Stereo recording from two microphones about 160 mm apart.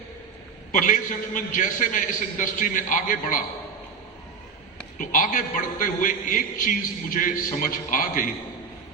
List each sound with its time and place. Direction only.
0.7 s a man's voice: 55° left (ahead or behind)
4.9 s a man's voice: 60° left (ahead or behind)